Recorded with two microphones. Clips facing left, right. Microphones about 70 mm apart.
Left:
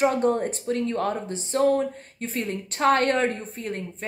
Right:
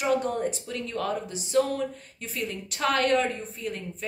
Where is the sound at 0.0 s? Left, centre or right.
Left.